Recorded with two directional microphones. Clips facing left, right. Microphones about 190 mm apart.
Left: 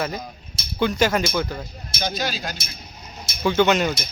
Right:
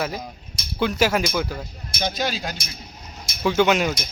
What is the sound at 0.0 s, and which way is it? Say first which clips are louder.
A man's voice: even; 5° right (ahead or behind).